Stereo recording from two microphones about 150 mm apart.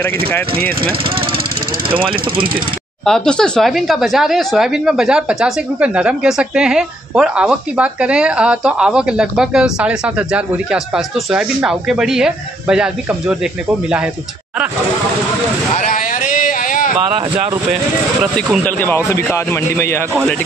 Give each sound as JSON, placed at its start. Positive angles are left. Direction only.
{"t": 0.3, "sound": "a man's voice", "side_deg": 10}
{"t": 2.0, "sound": "speech", "side_deg": -35}
{"t": 3.1, "sound": "speech", "side_deg": 5}
{"t": 15.7, "sound": "a sound", "side_deg": 60}
{"t": 18.6, "sound": "a man's voice", "side_deg": 15}